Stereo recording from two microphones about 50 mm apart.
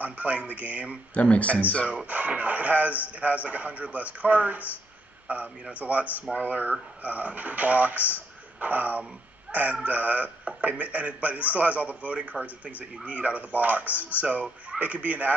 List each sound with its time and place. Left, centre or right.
0.0 s a man's voice: right
1.1 s speech: left
2.0 s a man's voice: right